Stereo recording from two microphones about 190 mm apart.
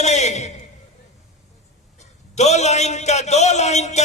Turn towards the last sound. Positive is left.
turn(degrees=35)  # may be behind; listen again after turning